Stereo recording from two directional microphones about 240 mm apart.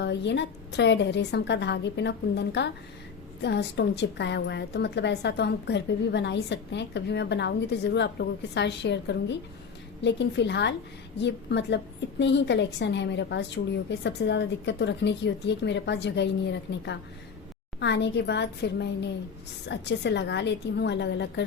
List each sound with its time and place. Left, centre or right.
0.0 s a woman's voice: left